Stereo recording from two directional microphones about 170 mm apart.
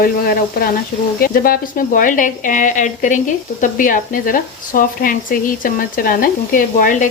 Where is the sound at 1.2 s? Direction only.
60° left (ahead or behind).